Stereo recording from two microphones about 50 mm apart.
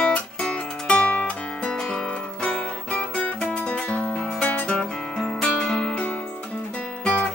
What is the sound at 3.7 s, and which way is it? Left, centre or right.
Music, left.